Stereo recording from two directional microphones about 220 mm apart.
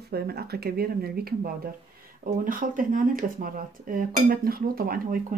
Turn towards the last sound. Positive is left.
turn(degrees=-40)  # may be behind; listen again after turning